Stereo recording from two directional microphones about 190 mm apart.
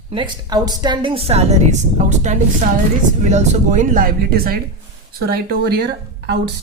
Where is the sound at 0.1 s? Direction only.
25° right (ahead or behind); by 5.7 s 55° right (ahead or behind).